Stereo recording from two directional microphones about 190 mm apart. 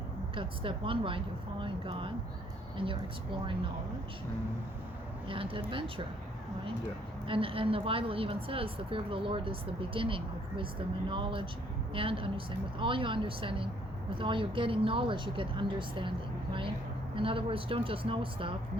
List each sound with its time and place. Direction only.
0.3 s a woman's voice: 25° right (ahead or behind)
5.3 s a woman's voice: 25° right (ahead or behind)
7.3 s a woman's voice: 30° right (ahead or behind)